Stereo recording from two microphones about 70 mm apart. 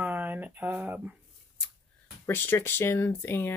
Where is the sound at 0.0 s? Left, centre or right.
Right.